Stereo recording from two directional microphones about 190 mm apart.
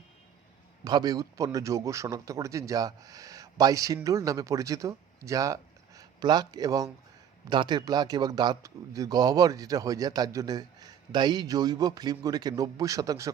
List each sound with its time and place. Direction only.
0.9 s a man's voice: 20° right (ahead or behind)